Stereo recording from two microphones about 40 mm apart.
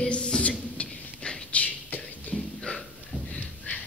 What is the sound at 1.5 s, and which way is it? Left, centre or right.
Beatboxing, left.